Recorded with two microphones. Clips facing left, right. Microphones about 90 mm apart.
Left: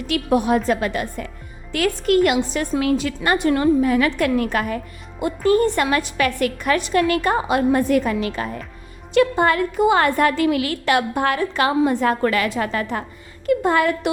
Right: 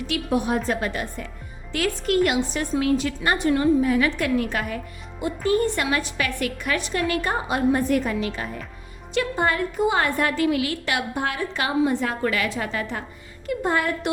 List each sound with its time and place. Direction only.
0.1 s a woman's voice: 65° left (ahead or behind); by 1.0 s 90° left
1.7 s a woman's voice: 60° left (ahead or behind)
7.1 s a woman's voice: 65° left (ahead or behind); by 8.1 s 80° left
8.4 s a woman's voice: 60° left (ahead or behind)
13.5 s a woman's voice: 85° left